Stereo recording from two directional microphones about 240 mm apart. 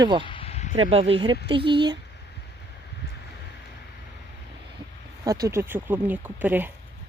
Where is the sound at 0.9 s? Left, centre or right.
Right.